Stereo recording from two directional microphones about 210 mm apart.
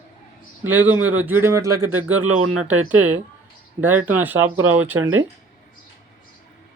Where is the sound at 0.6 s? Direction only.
10° right (ahead or behind).